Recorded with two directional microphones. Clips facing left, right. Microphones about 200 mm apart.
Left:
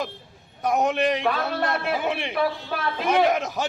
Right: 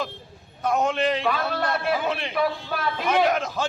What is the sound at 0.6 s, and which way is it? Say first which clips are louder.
A man's voice: left 1 dB; 15° left (ahead or behind).